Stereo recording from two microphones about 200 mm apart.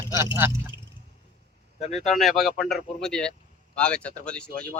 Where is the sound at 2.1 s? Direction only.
Centre (ahead or behind).